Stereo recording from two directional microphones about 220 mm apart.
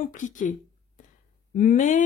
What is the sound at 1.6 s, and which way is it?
Speech, 35° left (ahead or behind).